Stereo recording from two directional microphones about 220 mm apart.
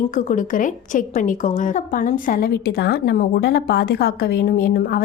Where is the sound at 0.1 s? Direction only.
35° left (ahead or behind).